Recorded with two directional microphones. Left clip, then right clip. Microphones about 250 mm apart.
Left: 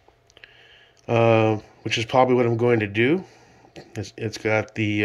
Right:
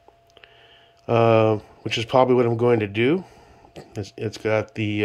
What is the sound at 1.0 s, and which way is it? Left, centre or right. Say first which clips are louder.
Speech: right 1 dB; centre.